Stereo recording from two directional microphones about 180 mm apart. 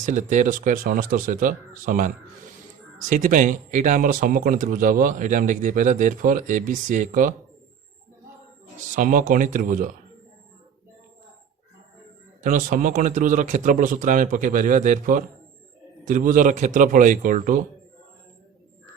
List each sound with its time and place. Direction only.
0.0 s speech: 45° right (ahead or behind)
9.0 s speech: 50° right (ahead or behind)
12.4 s speech: 45° right (ahead or behind)